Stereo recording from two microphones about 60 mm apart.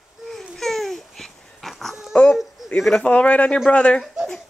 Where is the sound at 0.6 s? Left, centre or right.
Centre.